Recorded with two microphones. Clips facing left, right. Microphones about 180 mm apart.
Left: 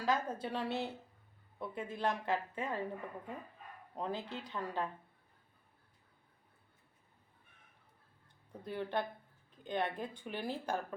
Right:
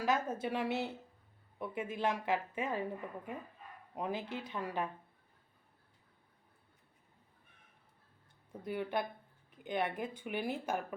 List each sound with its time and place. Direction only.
0.0 s a woman's voice: 20° right (ahead or behind)
8.6 s a woman's voice: 15° right (ahead or behind)